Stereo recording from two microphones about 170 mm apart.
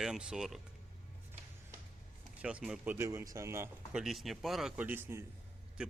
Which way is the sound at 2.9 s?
15° right (ahead or behind).